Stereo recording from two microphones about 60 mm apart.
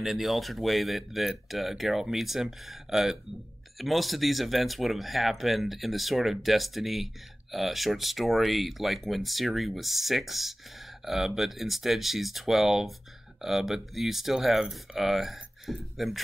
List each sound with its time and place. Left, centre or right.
0.0 s speech: centre